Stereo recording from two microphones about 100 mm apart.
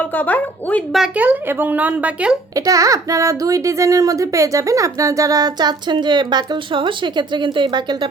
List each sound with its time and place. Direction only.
0.0 s speech: 15° left (ahead or behind)
0.9 s speech: 10° right (ahead or behind)
2.6 s a child's voice: 35° right (ahead or behind)